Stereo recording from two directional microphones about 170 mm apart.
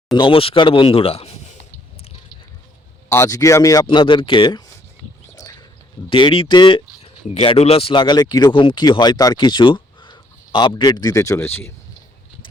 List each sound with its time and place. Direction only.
0.1 s speech: 30° left (ahead or behind)
3.1 s speech: 15° left (ahead or behind)
5.4 s a sound: 20° left (ahead or behind)
6.1 s speech: 30° left (ahead or behind)